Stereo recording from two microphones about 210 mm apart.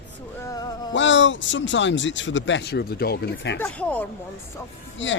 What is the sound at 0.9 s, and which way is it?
Speech, 60° left (ahead or behind).